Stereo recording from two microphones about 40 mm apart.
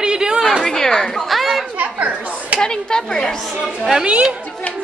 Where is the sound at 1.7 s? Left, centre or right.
Right.